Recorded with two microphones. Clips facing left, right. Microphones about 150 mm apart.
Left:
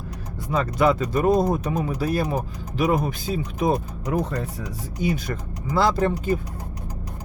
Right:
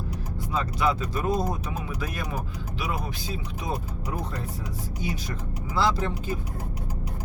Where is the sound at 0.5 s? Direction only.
55° left (ahead or behind); by 2.4 s 30° left (ahead or behind).